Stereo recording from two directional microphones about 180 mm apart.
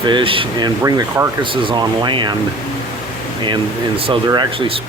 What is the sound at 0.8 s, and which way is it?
Speech, 20° right (ahead or behind).